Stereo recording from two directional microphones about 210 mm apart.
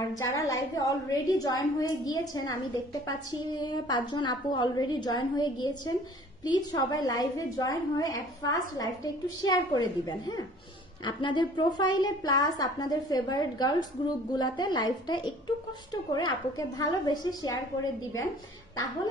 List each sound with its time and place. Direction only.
0.3 s a woman's voice: 15° left (ahead or behind)
16.3 s a woman's voice: 15° left (ahead or behind)